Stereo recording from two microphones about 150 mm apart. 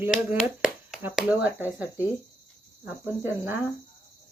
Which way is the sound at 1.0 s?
10° right (ahead or behind).